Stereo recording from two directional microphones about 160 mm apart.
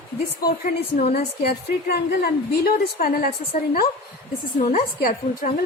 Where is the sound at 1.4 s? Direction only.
75° left (ahead or behind).